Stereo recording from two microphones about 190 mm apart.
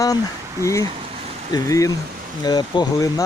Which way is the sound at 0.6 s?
15° left (ahead or behind).